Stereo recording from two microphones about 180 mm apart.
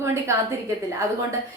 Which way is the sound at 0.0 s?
15° right (ahead or behind).